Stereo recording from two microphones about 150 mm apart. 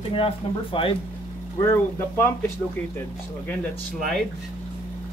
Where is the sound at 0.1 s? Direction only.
35° left (ahead or behind).